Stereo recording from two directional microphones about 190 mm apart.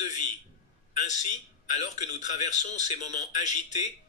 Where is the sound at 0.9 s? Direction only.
40° left (ahead or behind).